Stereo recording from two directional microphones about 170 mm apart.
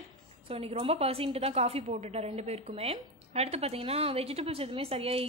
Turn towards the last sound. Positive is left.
turn(degrees=-35)  # may be behind; listen again after turning